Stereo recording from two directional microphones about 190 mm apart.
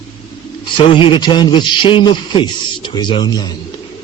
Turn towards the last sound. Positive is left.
turn(degrees=20)  # may be behind; listen again after turning